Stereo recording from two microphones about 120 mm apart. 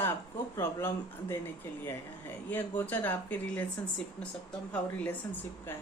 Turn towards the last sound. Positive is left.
turn(degrees=15)  # may be behind; listen again after turning